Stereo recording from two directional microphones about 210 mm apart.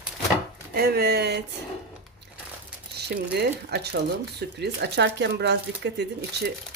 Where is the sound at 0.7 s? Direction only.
45° right (ahead or behind).